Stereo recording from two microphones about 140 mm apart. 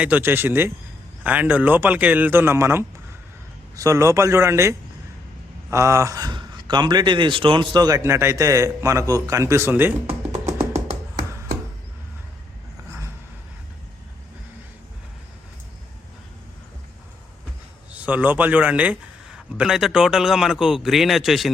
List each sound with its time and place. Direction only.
0.0 s a man's voice: 15° right (ahead or behind)
17.9 s a man's voice: 10° right (ahead or behind)